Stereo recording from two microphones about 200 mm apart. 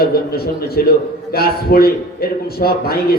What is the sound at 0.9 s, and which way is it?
A man's voice, 50° left (ahead or behind).